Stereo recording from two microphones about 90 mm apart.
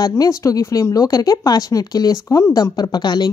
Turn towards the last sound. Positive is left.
turn(degrees=55)  # may be behind; listen again after turning